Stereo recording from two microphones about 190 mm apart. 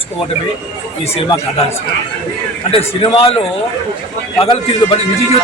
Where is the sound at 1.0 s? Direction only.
30° left (ahead or behind).